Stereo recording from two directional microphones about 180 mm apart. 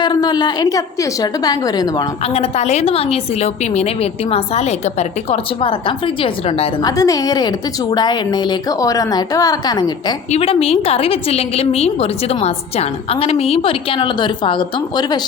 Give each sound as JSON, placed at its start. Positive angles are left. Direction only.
{"t": 0.0, "sound": "a woman's voice", "side_deg": 25}
{"t": 2.2, "sound": "a woman's voice", "side_deg": 35}
{"t": 6.9, "sound": "a woman's voice", "side_deg": 20}
{"t": 10.3, "sound": "a woman's voice", "side_deg": 35}